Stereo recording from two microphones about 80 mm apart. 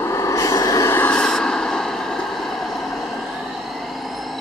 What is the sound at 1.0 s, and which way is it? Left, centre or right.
Vehicle, centre.